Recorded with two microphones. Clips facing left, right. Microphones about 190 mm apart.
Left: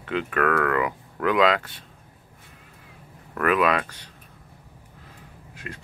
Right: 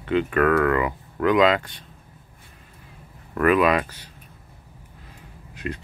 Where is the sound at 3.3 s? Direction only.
Centre (ahead or behind).